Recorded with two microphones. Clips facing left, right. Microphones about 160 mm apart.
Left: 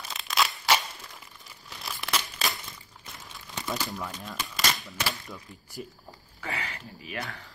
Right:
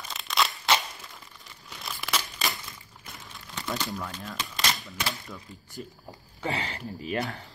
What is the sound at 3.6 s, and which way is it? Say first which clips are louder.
Speech: even; 5° left (ahead or behind).